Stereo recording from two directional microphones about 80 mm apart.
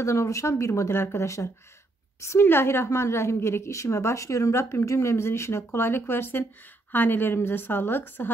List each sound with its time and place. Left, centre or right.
0.0 s a woman's voice: left